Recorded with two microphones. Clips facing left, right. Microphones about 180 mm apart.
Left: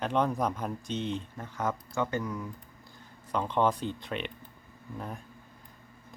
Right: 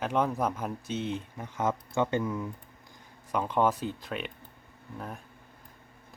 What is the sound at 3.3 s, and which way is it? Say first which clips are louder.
Speech: right 1 dB; 10° right (ahead or behind).